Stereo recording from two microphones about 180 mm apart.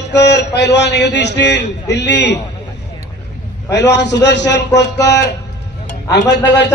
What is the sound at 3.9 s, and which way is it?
A man's voice, 75° left (ahead or behind).